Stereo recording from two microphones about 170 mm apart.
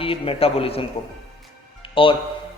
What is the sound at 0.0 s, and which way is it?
Speech, 35° left (ahead or behind).